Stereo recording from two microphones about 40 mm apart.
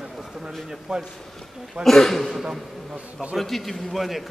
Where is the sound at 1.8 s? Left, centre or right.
Centre.